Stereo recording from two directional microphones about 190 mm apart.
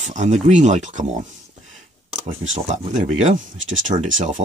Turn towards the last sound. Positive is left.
turn(degrees=-40)  # may be behind; listen again after turning